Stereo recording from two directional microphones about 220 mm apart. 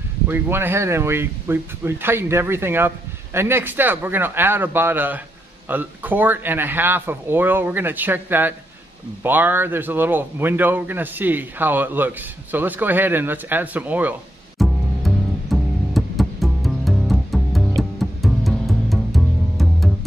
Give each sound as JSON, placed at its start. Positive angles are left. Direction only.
{"t": 0.3, "sound": "speech", "side_deg": -10}
{"t": 14.6, "sound": "music", "side_deg": 0}